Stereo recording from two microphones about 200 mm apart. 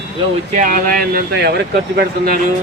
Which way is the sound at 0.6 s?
40° right (ahead or behind).